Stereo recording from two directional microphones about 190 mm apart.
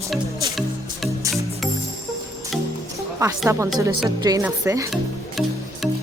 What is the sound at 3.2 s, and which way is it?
A woman's voice, 20° right (ahead or behind).